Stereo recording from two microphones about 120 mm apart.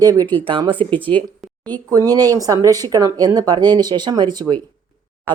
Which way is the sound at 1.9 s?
30° right (ahead or behind).